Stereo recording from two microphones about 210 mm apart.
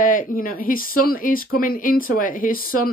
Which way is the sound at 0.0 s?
40° left (ahead or behind).